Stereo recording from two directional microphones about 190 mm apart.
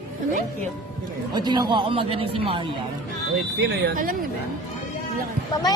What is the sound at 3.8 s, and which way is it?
Speech, 50° right (ahead or behind).